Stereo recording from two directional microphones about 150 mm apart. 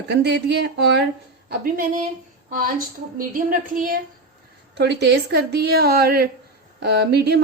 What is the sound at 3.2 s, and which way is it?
Speech, 65° right (ahead or behind).